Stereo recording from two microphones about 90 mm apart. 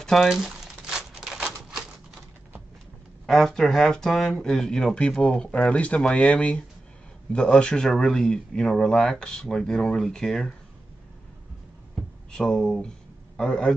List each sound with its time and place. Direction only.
0.0 s crumpling: centre (ahead or behind)
3.3 s speech: 5° left (ahead or behind)
12.3 s speech: 5° left (ahead or behind)